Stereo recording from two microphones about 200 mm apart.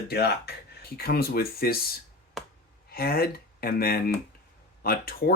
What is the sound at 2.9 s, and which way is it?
Speech, 50° left (ahead or behind).